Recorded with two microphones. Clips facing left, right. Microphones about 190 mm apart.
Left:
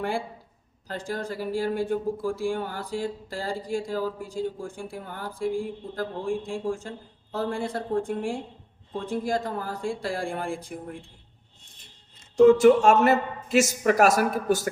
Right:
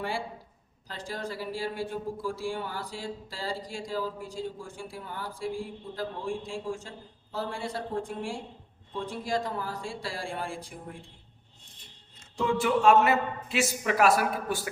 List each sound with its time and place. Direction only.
0.9 s speech: 50° left (ahead or behind)
12.4 s speech: 45° left (ahead or behind)